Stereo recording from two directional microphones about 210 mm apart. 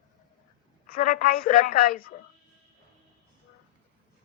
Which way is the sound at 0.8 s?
40° left (ahead or behind).